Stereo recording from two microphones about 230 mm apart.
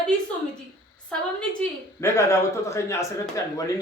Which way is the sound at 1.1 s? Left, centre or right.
Centre.